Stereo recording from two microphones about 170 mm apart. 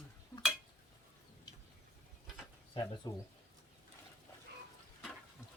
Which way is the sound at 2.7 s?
30° left (ahead or behind).